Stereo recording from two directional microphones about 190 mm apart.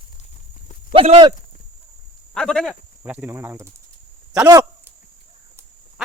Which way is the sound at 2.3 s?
5° left (ahead or behind).